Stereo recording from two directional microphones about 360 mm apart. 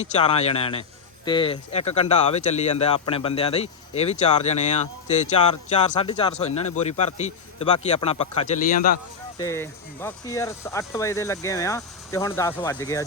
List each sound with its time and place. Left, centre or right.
0.0 s speech: centre
9.4 s speech: centre